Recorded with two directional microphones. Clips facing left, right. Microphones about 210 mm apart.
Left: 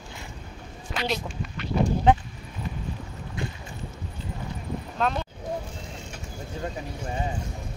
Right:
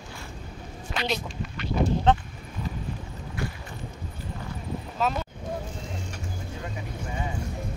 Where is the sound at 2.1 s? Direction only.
10° left (ahead or behind).